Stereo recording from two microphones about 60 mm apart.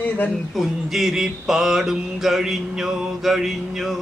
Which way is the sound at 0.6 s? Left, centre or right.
Centre.